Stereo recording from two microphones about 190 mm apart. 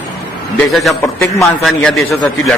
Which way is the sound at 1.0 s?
15° left (ahead or behind).